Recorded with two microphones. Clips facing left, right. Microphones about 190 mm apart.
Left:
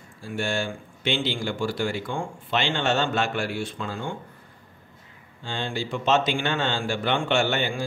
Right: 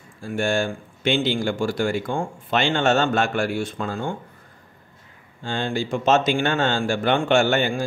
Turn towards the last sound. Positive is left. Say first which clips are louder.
# right 5 dB
turn(degrees=-45)  # may be behind; listen again after turning